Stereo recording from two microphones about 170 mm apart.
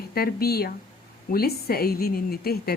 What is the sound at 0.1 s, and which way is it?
A woman's voice, 65° left (ahead or behind).